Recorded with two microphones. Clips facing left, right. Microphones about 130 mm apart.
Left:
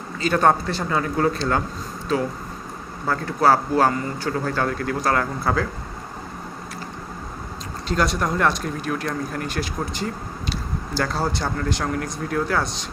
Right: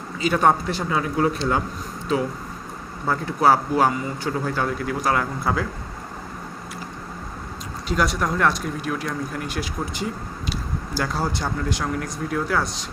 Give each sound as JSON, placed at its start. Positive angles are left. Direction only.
{"t": 0.2, "sound": "a man's voice", "side_deg": -10}
{"t": 7.9, "sound": "a man's voice", "side_deg": -10}